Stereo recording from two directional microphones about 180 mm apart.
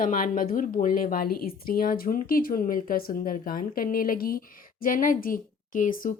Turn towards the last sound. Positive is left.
turn(degrees=45)  # may be behind; listen again after turning